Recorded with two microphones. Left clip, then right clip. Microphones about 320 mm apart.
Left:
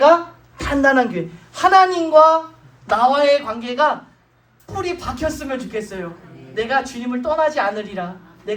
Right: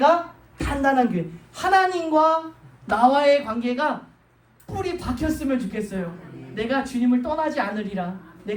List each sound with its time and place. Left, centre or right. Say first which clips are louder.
0.5 s a woman's voice: left 5 dB; left